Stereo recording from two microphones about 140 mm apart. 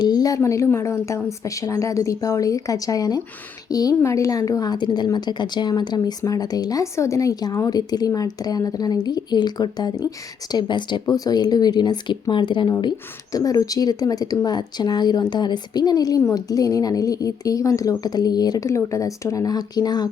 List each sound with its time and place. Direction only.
0.0 s speech: 25° left (ahead or behind)